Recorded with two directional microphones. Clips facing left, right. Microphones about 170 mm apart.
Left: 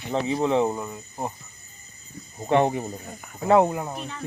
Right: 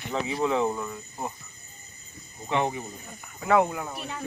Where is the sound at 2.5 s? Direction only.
55° left (ahead or behind).